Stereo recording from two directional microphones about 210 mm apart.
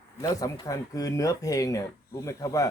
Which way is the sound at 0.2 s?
15° left (ahead or behind).